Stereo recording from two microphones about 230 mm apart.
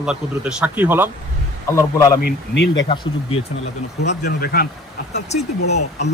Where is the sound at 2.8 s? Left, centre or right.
Left.